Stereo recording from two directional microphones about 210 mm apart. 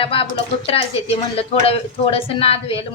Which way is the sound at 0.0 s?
25° left (ahead or behind).